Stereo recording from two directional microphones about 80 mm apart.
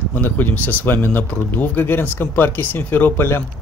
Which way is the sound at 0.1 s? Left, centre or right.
Left.